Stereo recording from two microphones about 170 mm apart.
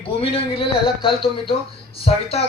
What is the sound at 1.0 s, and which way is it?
Speech, 30° left (ahead or behind).